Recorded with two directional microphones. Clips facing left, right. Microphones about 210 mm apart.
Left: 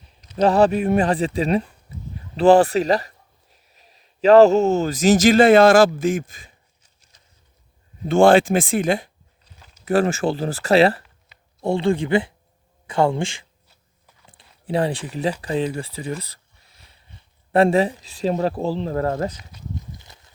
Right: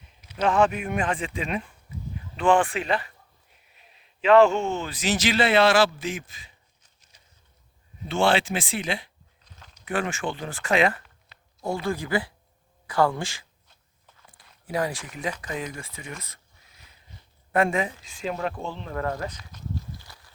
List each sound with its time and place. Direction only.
0.3 s a man's voice: 35° left (ahead or behind)
8.0 s speech: 50° left (ahead or behind)
9.4 s a sound: 5° left (ahead or behind)
9.8 s speech: 40° left (ahead or behind)
17.5 s speech: 35° left (ahead or behind)
19.5 s a sound: 15° left (ahead or behind)